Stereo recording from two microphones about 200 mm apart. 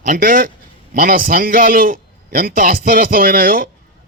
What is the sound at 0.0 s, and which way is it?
A man's voice, 40° right (ahead or behind).